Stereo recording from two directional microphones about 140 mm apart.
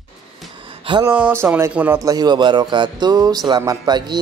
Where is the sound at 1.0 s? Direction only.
15° right (ahead or behind).